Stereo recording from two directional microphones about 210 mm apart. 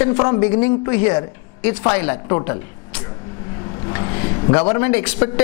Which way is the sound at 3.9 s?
20° left (ahead or behind).